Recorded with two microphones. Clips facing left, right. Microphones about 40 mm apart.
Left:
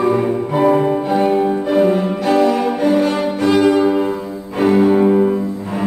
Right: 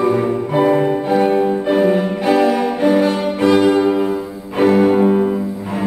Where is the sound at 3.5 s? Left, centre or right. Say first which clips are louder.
Left 2 dB; centre.